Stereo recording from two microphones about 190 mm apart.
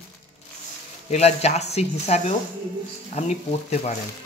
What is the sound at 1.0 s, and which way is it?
Speech, 35° left (ahead or behind).